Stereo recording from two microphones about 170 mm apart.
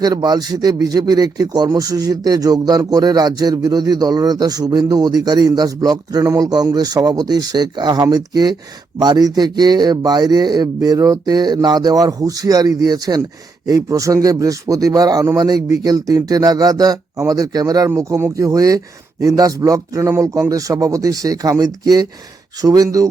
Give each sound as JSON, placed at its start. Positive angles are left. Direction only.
{"t": 0.0, "sound": "speech", "side_deg": -25}